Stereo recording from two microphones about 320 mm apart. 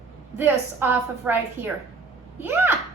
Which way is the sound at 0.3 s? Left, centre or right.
Centre.